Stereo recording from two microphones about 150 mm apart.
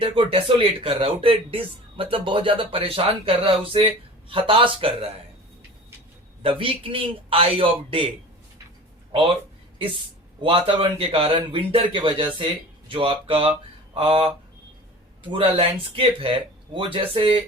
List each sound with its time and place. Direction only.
0.0 s speech: 35° right (ahead or behind)
6.4 s speech: 35° right (ahead or behind)
10.4 s speech: 35° right (ahead or behind)